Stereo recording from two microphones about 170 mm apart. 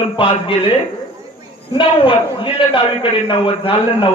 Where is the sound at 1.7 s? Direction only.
30° left (ahead or behind).